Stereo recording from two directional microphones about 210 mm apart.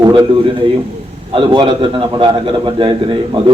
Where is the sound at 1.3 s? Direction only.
25° right (ahead or behind).